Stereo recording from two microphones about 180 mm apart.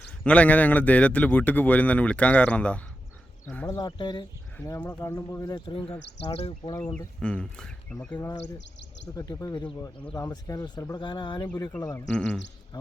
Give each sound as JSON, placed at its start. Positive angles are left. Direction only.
{"t": 0.3, "sound": "speech", "side_deg": 10}
{"t": 3.8, "sound": "speech", "side_deg": 25}
{"t": 4.5, "sound": "speech", "side_deg": 15}
{"t": 6.7, "sound": "speech", "side_deg": 10}
{"t": 9.1, "sound": "speech", "side_deg": 20}
{"t": 12.1, "sound": "a man's voice", "side_deg": 5}
{"t": 12.7, "sound": "speech", "side_deg": 20}